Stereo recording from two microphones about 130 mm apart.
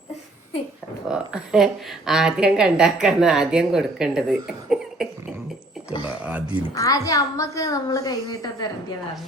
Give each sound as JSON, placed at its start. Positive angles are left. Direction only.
{"t": 1.0, "sound": "a woman's voice", "side_deg": -5}
{"t": 6.1, "sound": "speech", "side_deg": -10}
{"t": 6.7, "sound": "a woman's voice", "side_deg": 25}